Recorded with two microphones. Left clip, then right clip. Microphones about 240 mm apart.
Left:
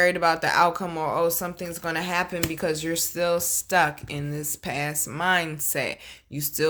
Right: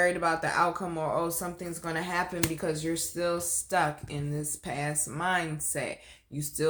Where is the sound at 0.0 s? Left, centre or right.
Left.